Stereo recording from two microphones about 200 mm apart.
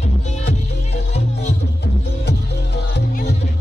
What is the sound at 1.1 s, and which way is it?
Music, 35° left (ahead or behind).